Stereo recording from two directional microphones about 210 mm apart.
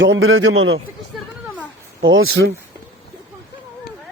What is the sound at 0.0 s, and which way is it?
Speech, 65° right (ahead or behind).